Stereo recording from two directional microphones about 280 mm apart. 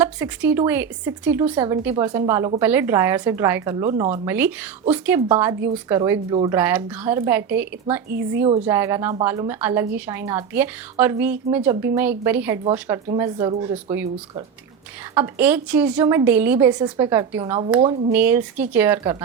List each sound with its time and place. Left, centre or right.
0.0 s a woman's voice: centre
15.1 s a woman's voice: centre
18.2 s a woman's voice: centre